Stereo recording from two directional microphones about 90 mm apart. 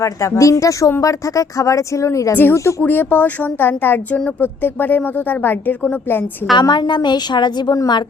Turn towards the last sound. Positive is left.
turn(degrees=45)  # may be behind; listen again after turning